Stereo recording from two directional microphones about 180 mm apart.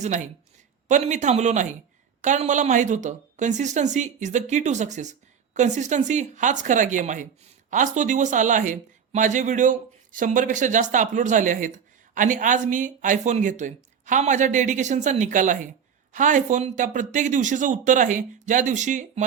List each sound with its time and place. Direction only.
0.9 s a woman's voice: 40° right (ahead or behind)